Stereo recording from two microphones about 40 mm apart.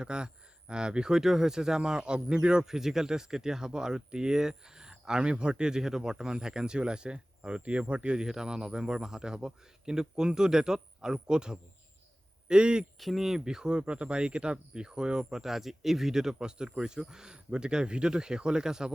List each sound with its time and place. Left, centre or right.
0.0 s speech: right
13.0 s speech: centre